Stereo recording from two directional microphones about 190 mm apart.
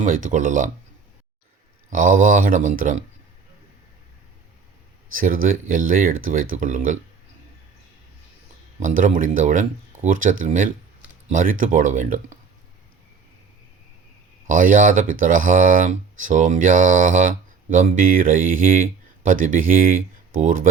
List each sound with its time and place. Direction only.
0.0 s speech: 40° right (ahead or behind)
1.9 s speech: 45° right (ahead or behind)
5.1 s speech: 45° right (ahead or behind)
8.8 s speech: 45° right (ahead or behind)
14.4 s speech: 45° right (ahead or behind)